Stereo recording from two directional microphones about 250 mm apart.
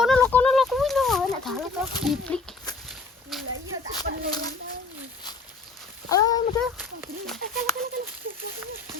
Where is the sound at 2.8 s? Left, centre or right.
Centre.